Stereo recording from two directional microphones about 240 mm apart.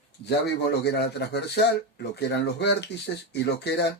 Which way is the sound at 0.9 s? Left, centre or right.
Left.